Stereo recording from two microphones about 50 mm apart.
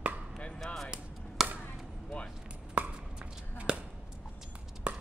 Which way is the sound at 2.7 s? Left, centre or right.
Right.